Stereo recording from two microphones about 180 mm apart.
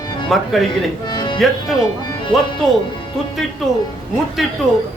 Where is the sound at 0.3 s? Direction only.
Centre (ahead or behind).